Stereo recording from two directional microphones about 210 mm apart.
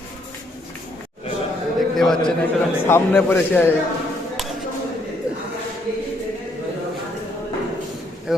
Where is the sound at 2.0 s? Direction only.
Centre (ahead or behind).